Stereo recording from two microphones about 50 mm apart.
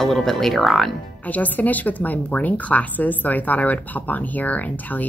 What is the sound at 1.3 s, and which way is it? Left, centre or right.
Speech, left.